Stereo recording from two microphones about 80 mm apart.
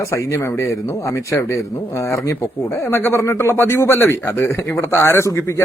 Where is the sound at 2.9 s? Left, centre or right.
Left.